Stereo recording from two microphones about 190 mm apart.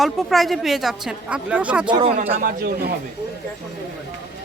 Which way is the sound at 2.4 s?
50° right (ahead or behind).